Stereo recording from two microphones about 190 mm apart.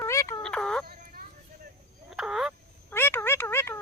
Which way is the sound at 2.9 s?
10° left (ahead or behind).